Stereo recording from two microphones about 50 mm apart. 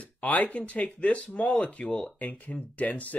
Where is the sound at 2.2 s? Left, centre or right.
Left.